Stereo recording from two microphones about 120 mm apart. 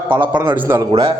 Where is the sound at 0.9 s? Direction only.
45° right (ahead or behind).